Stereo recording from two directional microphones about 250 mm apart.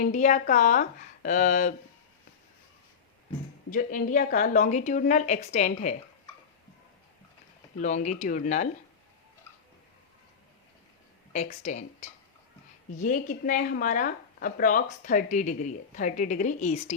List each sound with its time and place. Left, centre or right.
0.0 s a woman's voice: left
3.7 s a woman's voice: left
7.8 s a woman's voice: left
11.3 s a woman's voice: left